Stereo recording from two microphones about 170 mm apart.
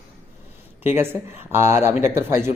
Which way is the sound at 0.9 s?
10° right (ahead or behind).